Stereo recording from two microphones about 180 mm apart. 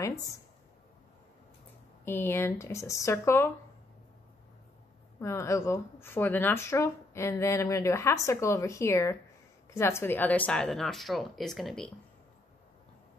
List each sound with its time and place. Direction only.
2.0 s speech: 15° left (ahead or behind)
5.2 s speech: 15° left (ahead or behind)